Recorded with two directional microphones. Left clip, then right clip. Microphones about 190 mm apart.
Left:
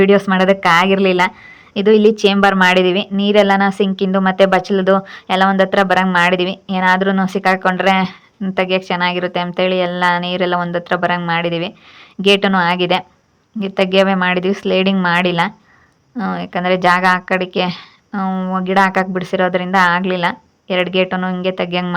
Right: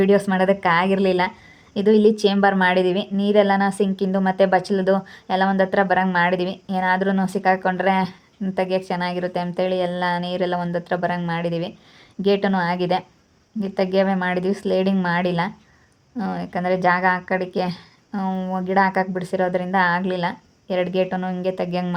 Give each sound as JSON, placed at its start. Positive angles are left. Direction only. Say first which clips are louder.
{"t": 0.0, "sound": "a woman's voice", "louder": "left 6 dB", "side_deg": 15}